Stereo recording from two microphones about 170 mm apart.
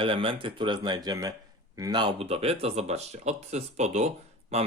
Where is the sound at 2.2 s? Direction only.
35° right (ahead or behind).